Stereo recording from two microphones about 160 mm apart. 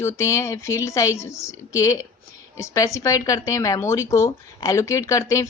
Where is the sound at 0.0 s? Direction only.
15° left (ahead or behind).